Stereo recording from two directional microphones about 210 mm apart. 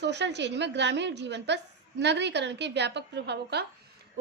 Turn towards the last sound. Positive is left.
turn(degrees=-50)  # may be behind; listen again after turning